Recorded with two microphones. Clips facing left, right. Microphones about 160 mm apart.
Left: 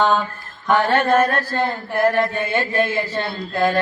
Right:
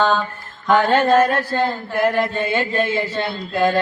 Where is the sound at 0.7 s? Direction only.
15° right (ahead or behind).